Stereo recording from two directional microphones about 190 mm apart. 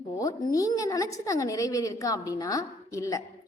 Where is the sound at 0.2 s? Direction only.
20° left (ahead or behind).